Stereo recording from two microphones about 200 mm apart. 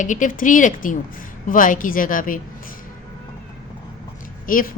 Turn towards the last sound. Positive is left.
turn(degrees=45)  # may be behind; listen again after turning